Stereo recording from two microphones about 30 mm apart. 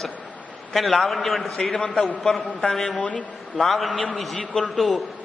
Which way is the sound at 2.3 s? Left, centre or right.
Left.